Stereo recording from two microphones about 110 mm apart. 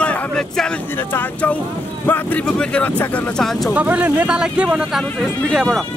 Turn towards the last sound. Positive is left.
turn(degrees=5)  # may be behind; listen again after turning